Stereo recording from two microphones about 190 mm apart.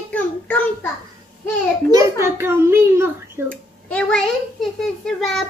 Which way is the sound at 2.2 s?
15° right (ahead or behind).